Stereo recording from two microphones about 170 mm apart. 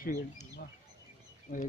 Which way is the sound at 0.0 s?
45° left (ahead or behind).